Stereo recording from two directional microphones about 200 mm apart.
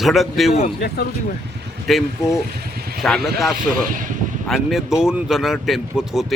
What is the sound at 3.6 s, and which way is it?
Speech, 40° right (ahead or behind).